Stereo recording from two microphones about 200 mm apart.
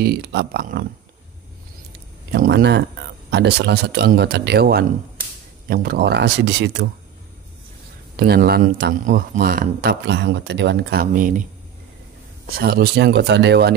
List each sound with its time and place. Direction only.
0.0 s speech: 55° right (ahead or behind)
2.3 s speech: 50° right (ahead or behind)
8.2 s speech: 50° right (ahead or behind)
12.4 s speech: 50° right (ahead or behind)